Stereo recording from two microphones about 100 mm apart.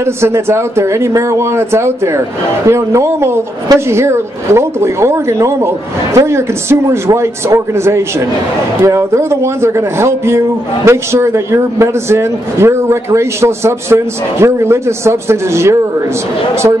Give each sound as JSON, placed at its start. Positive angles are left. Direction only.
{"t": 0.0, "sound": "a man's voice", "side_deg": -25}